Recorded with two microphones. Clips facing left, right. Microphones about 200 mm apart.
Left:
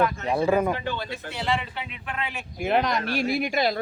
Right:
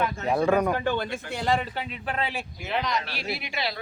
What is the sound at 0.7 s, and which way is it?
A man's voice, 50° right (ahead or behind).